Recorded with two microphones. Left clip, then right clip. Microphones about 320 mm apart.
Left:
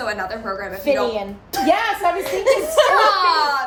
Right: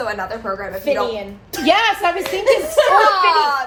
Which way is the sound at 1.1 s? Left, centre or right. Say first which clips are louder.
Left 2 dB; centre.